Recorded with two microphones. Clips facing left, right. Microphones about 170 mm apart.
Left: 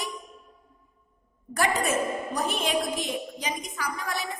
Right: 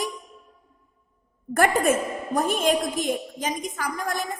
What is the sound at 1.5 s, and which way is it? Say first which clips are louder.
A woman's voice: right 5 dB; 50° right (ahead or behind).